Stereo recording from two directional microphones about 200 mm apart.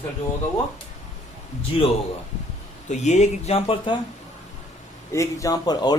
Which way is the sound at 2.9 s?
35° left (ahead or behind).